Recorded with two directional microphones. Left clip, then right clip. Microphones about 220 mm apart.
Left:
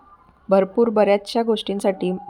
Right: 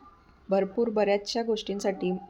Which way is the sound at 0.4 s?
20° left (ahead or behind).